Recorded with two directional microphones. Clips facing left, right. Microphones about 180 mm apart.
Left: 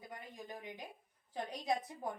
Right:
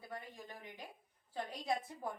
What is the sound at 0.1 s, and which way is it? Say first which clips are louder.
A woman's voice: even; 15° left (ahead or behind).